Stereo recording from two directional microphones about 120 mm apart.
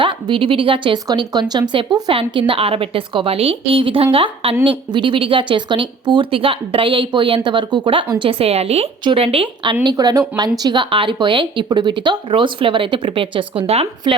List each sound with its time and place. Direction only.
0.0 s a woman's voice: 45° right (ahead or behind)
1.0 s a woman's voice: 35° right (ahead or behind); by 9.7 s 50° right (ahead or behind)
9.8 s speech: 35° right (ahead or behind); by 13.8 s 55° right (ahead or behind)